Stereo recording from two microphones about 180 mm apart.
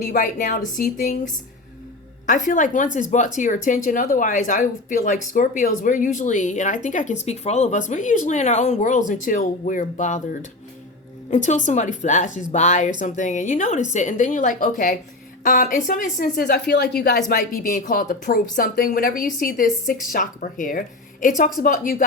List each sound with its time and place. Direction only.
0.0 s speech: 50° left (ahead or behind)
11.3 s speech: 45° left (ahead or behind)